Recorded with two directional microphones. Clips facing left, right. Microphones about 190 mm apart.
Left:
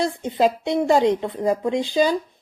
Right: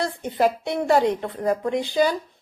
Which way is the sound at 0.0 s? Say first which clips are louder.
Left 2 dB; 20° left (ahead or behind).